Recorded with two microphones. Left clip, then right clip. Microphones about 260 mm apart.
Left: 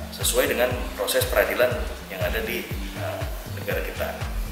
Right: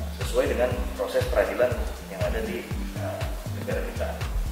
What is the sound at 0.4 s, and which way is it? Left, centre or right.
Speech, centre.